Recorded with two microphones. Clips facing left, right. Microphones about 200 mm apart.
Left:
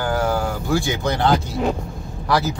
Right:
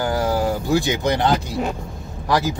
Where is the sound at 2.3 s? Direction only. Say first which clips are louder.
Even; 15° right (ahead or behind).